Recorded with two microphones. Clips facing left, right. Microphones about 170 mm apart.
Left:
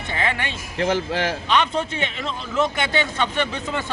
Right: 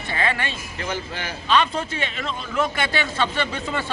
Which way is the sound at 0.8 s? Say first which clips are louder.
Left 9 dB; 90° left.